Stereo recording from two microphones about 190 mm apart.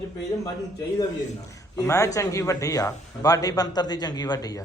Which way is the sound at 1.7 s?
15° left (ahead or behind).